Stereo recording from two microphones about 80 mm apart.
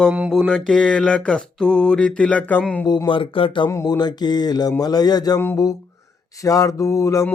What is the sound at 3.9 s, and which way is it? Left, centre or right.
Speech, left.